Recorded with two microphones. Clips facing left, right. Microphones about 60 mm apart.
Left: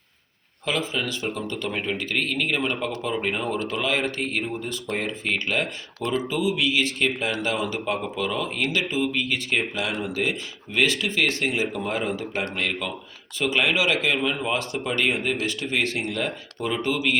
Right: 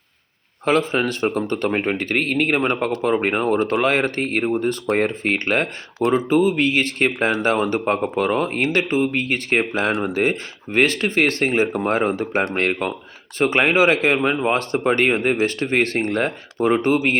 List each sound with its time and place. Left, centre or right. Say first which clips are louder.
0.6 s speech: right 8 dB; right